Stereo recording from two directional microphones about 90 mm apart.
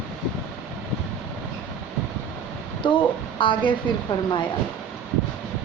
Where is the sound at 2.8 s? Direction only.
70° left (ahead or behind).